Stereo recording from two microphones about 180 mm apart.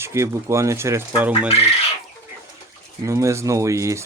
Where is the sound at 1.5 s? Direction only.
35° left (ahead or behind).